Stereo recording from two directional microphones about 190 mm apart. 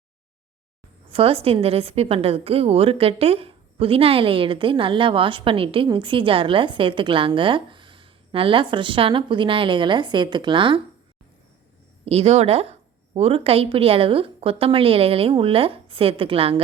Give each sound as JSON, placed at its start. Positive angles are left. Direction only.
{"t": 1.1, "sound": "a woman's voice", "side_deg": -30}
{"t": 12.0, "sound": "a woman's voice", "side_deg": -35}